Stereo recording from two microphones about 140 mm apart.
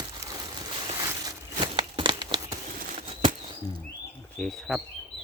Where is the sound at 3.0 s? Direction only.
35° right (ahead or behind).